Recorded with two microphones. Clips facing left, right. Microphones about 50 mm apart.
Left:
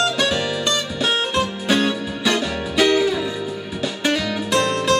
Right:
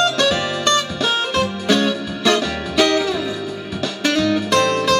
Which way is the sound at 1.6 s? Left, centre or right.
Centre.